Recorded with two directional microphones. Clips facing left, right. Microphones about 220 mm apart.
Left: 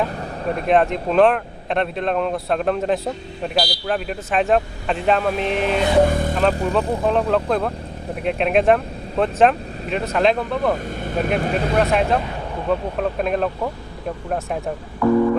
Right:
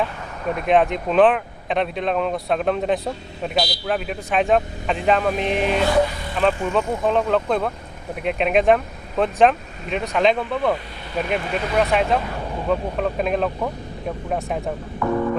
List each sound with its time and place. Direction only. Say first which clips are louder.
0.7 s speech: even; centre (ahead or behind)
6.1 s speech: left 8 dB; 50° left (ahead or behind)
6.5 s speech: left 2 dB; 35° left (ahead or behind)
7.0 s speech: left 1 dB; centre (ahead or behind)
11.0 s speech: left 4 dB; 45° left (ahead or behind)
11.5 s speech: even; centre (ahead or behind)